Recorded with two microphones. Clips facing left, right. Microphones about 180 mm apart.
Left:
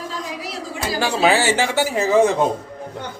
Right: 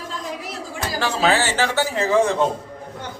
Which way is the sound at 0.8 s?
10° left (ahead or behind).